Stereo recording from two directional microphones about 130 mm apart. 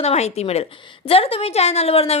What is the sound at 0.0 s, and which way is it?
A woman's voice, 55° left (ahead or behind).